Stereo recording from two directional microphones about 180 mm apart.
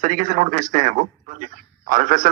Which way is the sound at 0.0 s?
45° right (ahead or behind).